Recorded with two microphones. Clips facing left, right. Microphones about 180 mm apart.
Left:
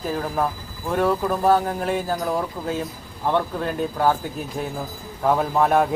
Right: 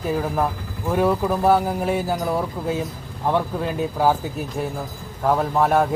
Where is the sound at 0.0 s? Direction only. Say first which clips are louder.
Right 2 dB; 5° right (ahead or behind).